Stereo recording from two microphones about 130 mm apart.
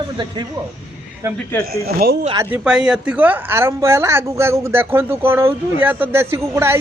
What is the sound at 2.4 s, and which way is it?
A woman's voice, 10° right (ahead or behind).